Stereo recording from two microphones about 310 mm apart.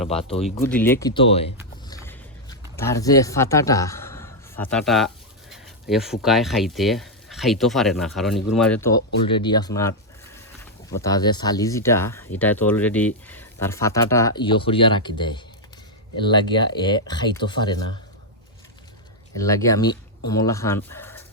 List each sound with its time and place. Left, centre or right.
0.1 s speech: centre
0.6 s speech: centre
1.9 s a sound: centre
5.9 s speech: centre
19.4 s speech: centre